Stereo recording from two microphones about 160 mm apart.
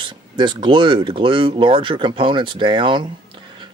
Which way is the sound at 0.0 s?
30° right (ahead or behind).